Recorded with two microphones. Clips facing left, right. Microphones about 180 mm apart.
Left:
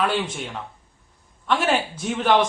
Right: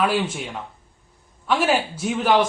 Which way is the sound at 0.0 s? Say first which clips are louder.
Right 2 dB; 5° right (ahead or behind).